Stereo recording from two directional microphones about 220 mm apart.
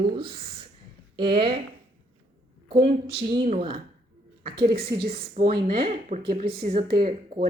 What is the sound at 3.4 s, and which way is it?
A woman's voice, 30° right (ahead or behind).